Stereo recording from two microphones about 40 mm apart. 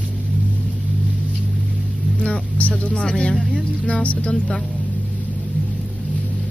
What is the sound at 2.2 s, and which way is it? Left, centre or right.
Speech, left.